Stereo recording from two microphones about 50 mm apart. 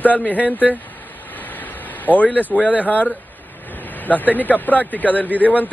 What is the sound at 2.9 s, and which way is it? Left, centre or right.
Speech, left.